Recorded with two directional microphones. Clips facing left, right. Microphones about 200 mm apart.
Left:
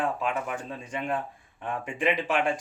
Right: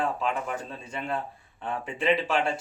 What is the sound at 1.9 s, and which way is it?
Speech, 15° left (ahead or behind).